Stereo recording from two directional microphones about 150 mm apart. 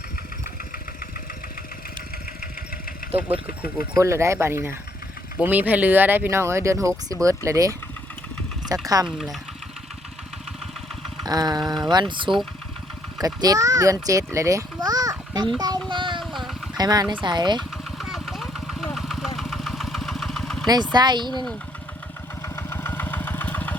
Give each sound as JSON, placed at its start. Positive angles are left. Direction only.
{"t": 3.0, "sound": "engine", "side_deg": 75}
{"t": 3.4, "sound": "speech", "side_deg": 75}
{"t": 3.9, "sound": "speech", "side_deg": -20}
{"t": 9.0, "sound": "speech", "side_deg": 0}
{"t": 11.3, "sound": "a child's voice", "side_deg": -25}
{"t": 15.9, "sound": "a sound", "side_deg": -30}
{"t": 16.2, "sound": "a sound", "side_deg": 0}
{"t": 16.7, "sound": "speech", "side_deg": -25}
{"t": 17.6, "sound": "vehicle", "side_deg": 0}
{"t": 18.9, "sound": "engine", "side_deg": 0}
{"t": 20.7, "sound": "speech", "side_deg": -30}
{"t": 22.5, "sound": "engine", "side_deg": 15}